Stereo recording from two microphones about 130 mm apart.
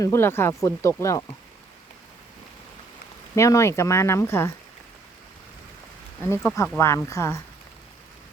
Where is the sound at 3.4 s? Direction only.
20° left (ahead or behind).